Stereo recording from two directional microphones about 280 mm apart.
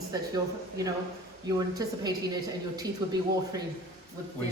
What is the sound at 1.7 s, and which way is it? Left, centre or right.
Speech, centre.